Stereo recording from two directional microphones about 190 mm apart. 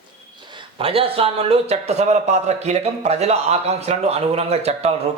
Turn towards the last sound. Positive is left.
turn(degrees=-35)  # may be behind; listen again after turning